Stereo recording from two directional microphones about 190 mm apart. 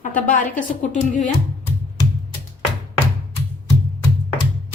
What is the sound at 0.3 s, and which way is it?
A woman's voice, 40° left (ahead or behind).